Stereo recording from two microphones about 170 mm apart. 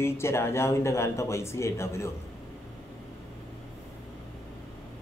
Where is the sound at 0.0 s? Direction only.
15° left (ahead or behind).